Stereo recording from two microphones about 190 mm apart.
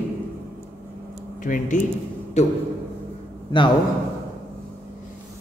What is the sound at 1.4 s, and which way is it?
A man's voice, 45° left (ahead or behind).